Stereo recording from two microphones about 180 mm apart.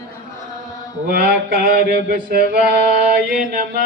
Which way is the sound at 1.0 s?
55° right (ahead or behind).